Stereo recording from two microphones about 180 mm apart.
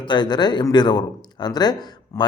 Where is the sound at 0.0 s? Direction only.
25° left (ahead or behind).